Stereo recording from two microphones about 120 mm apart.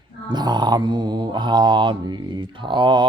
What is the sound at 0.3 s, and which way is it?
Mantra, 35° right (ahead or behind).